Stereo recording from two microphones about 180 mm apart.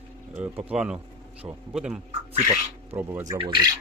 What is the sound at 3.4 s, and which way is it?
Speech, 25° right (ahead or behind).